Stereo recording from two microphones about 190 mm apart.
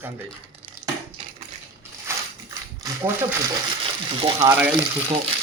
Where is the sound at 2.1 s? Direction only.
15° right (ahead or behind).